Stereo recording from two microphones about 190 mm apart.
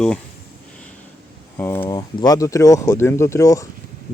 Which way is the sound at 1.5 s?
10° left (ahead or behind).